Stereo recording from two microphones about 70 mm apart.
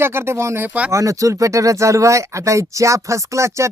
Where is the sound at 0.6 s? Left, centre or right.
Right.